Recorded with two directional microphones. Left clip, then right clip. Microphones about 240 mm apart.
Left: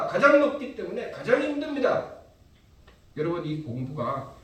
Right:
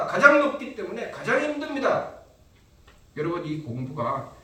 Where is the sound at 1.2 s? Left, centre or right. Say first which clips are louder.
Even; right.